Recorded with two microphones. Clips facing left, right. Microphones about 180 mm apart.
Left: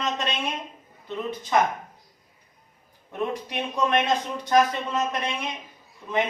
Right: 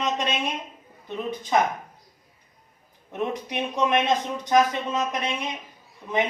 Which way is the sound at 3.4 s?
15° right (ahead or behind).